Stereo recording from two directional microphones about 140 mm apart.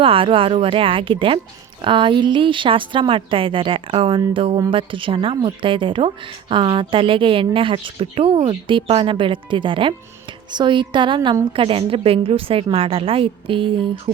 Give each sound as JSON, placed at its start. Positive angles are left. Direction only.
{"t": 0.0, "sound": "a woman's voice", "side_deg": -40}